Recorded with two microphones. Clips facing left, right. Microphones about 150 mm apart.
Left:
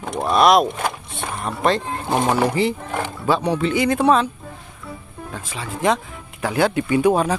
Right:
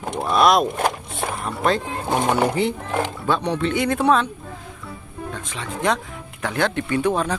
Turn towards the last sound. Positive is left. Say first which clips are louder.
# left 4 dB
turn(degrees=10)  # may be behind; listen again after turning